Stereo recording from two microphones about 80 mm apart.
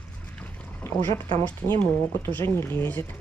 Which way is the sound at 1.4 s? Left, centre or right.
Left.